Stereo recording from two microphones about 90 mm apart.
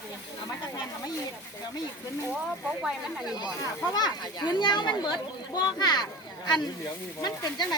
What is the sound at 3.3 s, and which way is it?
A child's voice, 55° left (ahead or behind).